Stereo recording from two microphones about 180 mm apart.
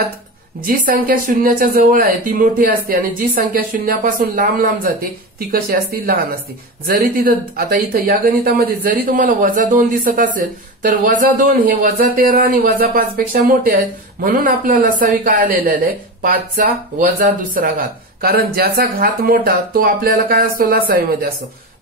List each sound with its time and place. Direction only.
0.7 s speech: 50° right (ahead or behind)